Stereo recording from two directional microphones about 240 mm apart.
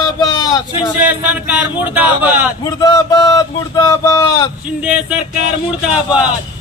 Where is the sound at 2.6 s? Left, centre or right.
Centre.